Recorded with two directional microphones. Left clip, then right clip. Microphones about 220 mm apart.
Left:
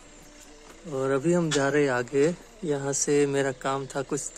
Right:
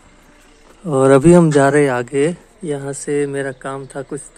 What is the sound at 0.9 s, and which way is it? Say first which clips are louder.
Speech: right 15 dB; 45° right (ahead or behind).